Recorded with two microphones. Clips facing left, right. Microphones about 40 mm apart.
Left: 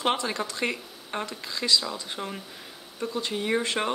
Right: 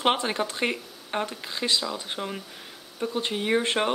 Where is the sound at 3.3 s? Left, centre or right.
Right.